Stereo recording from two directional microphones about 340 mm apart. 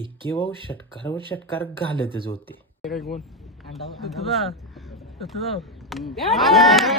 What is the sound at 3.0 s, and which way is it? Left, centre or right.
Speech, left.